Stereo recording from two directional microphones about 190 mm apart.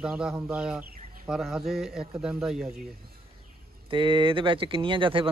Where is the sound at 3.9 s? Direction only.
25° right (ahead or behind).